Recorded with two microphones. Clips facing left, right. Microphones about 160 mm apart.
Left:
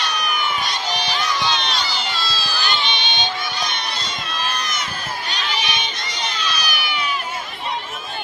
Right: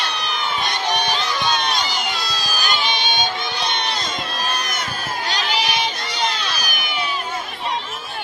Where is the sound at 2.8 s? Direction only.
40° right (ahead or behind).